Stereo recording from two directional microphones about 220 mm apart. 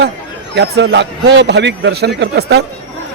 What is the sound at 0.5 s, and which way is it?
A man's voice, 50° right (ahead or behind).